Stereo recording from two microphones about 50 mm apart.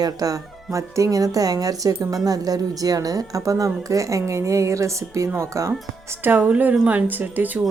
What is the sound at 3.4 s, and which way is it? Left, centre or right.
A woman's voice, right.